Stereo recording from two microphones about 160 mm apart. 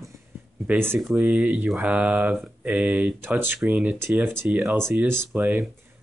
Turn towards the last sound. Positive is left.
turn(degrees=-5)  # may be behind; listen again after turning